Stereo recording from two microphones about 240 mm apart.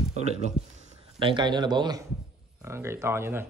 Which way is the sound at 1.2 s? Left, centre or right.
Centre.